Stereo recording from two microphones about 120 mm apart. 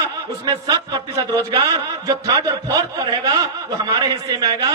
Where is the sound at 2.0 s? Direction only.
25° right (ahead or behind).